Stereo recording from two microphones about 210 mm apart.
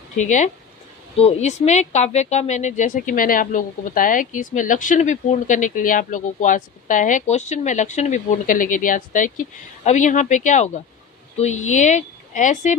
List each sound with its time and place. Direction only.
0.2 s speech: 35° left (ahead or behind)